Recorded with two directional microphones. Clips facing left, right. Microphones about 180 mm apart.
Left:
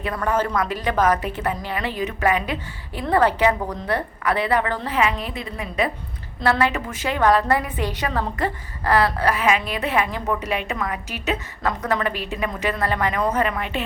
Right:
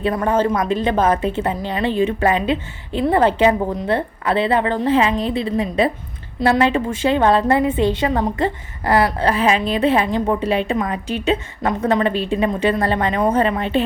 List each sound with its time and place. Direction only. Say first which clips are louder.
0.0 s a woman's voice: right 5 dB; 30° right (ahead or behind)